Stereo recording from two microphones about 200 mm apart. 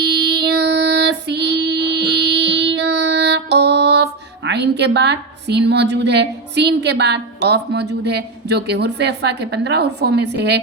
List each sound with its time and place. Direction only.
0.0 s child singing: 55° right (ahead or behind)